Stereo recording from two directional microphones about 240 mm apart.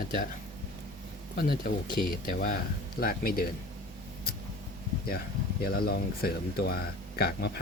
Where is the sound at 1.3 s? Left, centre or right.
Left.